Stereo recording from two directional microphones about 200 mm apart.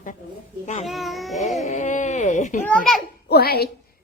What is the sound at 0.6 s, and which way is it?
Speech, 35° left (ahead or behind).